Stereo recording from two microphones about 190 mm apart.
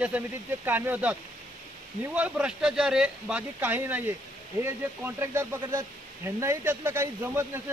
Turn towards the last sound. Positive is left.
turn(degrees=-10)  # may be behind; listen again after turning